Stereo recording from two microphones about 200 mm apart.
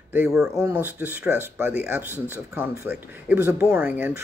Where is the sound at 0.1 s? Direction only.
5° right (ahead or behind).